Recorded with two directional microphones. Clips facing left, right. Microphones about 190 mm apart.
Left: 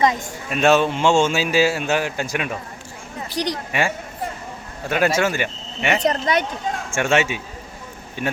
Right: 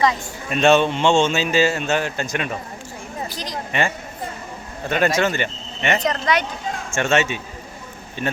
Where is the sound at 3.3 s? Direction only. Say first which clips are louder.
Left 7 dB; 70° left (ahead or behind).